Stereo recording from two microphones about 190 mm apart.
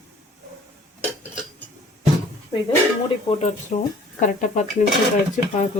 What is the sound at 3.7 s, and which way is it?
Speech, 40° left (ahead or behind).